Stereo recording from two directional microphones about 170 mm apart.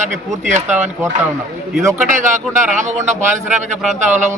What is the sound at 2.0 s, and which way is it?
A man's voice, 50° right (ahead or behind).